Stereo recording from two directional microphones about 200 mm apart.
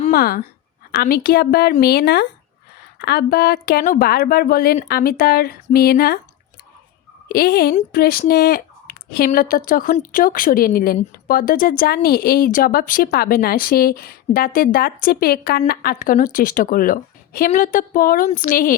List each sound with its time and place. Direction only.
0.1 s a woman's voice: 50° left (ahead or behind)
7.3 s a woman's voice: 50° left (ahead or behind)